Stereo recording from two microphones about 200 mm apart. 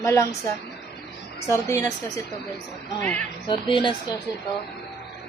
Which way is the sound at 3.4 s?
25° left (ahead or behind).